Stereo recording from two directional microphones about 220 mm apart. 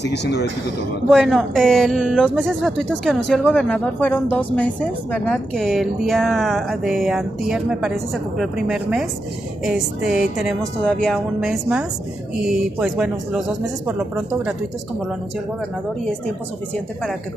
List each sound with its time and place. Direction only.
0.0 s speech: 50° left (ahead or behind)
1.1 s speech: centre (ahead or behind)